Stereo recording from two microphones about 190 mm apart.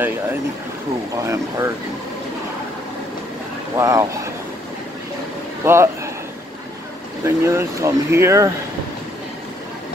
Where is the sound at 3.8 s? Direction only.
15° right (ahead or behind).